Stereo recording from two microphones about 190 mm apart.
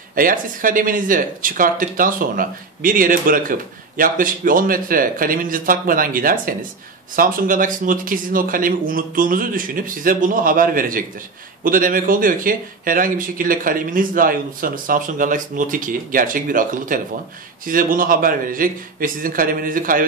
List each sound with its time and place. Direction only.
0.1 s speech: 45° right (ahead or behind)